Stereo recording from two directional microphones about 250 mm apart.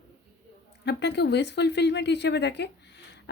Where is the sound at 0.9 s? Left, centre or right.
Left.